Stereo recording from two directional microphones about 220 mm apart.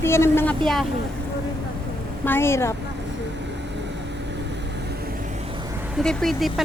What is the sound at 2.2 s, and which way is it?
Speech, 10° left (ahead or behind).